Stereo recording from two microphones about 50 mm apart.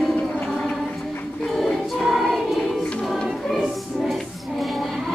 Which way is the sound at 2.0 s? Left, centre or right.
Centre.